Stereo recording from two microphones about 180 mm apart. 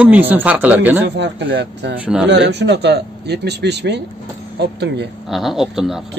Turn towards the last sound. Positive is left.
turn(degrees=0)  # may be behind; listen again after turning